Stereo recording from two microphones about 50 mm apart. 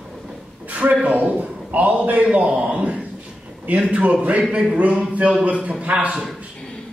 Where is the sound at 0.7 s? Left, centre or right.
Right.